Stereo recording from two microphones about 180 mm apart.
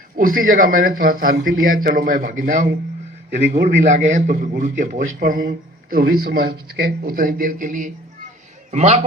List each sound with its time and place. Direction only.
0.2 s a man's voice: 50° right (ahead or behind)